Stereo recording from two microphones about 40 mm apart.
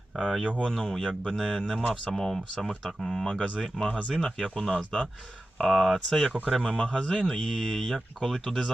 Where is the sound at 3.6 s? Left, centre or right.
Centre.